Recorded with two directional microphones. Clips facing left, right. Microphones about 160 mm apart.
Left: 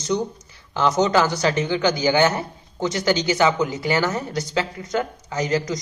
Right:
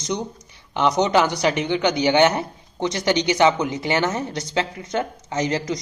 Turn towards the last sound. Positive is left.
turn(degrees=-25)  # may be behind; listen again after turning